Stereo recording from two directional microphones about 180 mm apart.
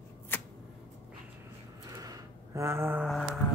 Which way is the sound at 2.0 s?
20° right (ahead or behind).